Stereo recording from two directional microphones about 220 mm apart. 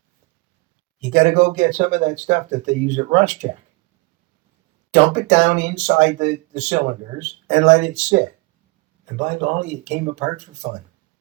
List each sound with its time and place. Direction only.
1.1 s speech: 35° right (ahead or behind)
4.9 s speech: 35° right (ahead or behind)